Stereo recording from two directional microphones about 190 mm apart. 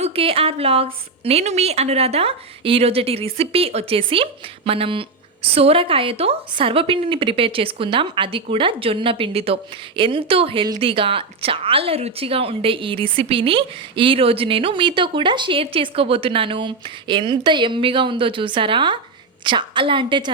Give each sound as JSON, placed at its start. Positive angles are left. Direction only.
{"t": 0.0, "sound": "a woman's voice", "side_deg": -30}